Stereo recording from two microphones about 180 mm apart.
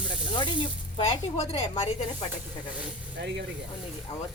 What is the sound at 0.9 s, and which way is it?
Speech, 35° left (ahead or behind).